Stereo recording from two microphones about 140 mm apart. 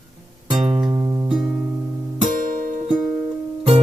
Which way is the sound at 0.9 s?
20° right (ahead or behind).